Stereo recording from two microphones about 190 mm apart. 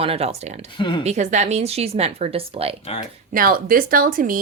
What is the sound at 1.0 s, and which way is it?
Speech, 35° right (ahead or behind).